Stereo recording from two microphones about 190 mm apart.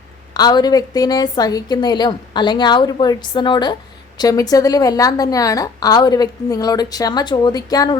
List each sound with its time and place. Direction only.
0.3 s a woman's voice: 20° left (ahead or behind)